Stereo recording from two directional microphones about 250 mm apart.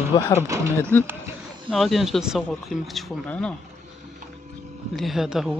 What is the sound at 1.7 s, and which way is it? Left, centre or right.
Speech, centre.